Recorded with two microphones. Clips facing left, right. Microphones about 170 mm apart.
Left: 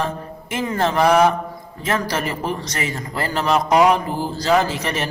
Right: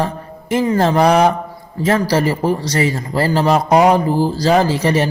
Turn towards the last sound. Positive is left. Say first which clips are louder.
# right 5 dB
turn(degrees=-30)  # may be behind; listen again after turning